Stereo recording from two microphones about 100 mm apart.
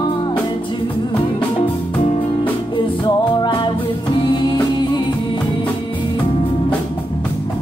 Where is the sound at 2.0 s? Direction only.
80° left.